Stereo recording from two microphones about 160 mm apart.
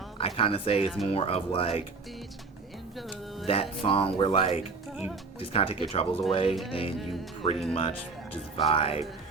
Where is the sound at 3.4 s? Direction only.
35° left (ahead or behind).